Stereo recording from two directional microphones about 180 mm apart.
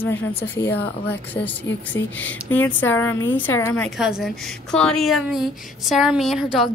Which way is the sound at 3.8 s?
Centre (ahead or behind).